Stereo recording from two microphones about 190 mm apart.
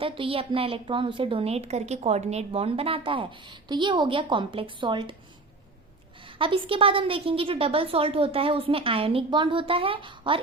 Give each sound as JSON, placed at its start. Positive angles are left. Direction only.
{"t": 0.0, "sound": "a woman's voice", "side_deg": -30}
{"t": 6.2, "sound": "a woman's voice", "side_deg": -30}